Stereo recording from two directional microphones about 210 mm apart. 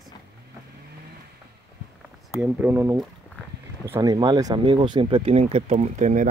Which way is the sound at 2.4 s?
10° right (ahead or behind).